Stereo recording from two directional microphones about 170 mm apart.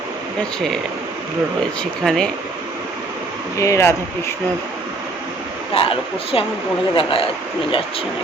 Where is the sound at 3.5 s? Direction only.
20° left (ahead or behind).